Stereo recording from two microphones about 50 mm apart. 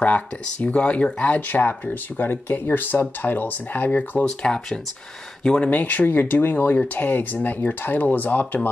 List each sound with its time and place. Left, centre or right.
0.0 s speech: left
4.4 s speech: centre
5.7 s speech: left